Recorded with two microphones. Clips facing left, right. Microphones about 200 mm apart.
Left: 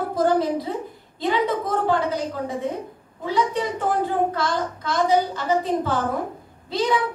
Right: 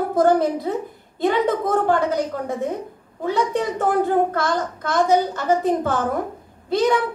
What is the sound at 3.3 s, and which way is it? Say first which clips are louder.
A child's voice: right 2 dB; 50° right (ahead or behind).